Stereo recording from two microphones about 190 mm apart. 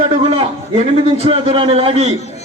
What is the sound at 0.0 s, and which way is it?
A man's voice, 30° right (ahead or behind).